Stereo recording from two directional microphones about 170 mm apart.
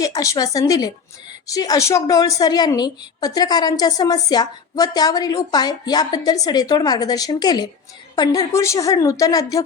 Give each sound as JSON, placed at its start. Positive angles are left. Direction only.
{"t": 0.0, "sound": "a woman's voice", "side_deg": 20}